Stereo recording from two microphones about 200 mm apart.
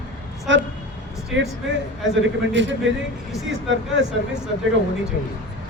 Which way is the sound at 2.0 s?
70° right (ahead or behind).